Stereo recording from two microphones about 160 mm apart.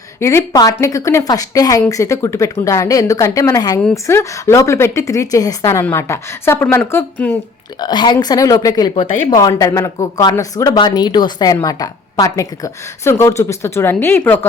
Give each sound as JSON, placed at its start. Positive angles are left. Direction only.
{"t": 0.2, "sound": "a woman's voice", "side_deg": 15}
{"t": 7.8, "sound": "a woman's voice", "side_deg": 25}